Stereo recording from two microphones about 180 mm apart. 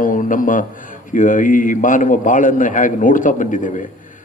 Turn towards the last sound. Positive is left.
turn(degrees=45)  # may be behind; listen again after turning